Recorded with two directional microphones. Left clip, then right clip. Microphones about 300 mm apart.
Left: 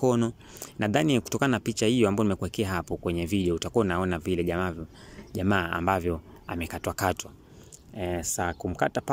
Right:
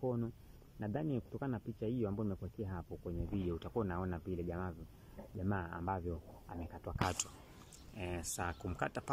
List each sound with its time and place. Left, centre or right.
0.0 s speech: left
3.3 s speech: left
7.9 s speech: left